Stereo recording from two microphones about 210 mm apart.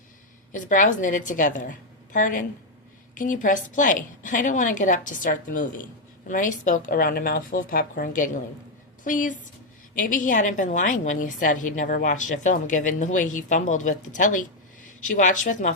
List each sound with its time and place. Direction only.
0.5 s a woman's voice: 40° left (ahead or behind)